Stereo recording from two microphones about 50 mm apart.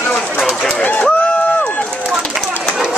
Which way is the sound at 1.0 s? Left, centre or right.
Left.